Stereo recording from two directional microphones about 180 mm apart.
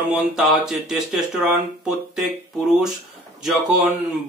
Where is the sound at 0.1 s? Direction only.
Centre (ahead or behind).